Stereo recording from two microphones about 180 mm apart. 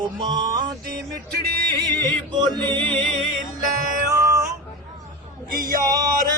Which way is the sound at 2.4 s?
25° right (ahead or behind).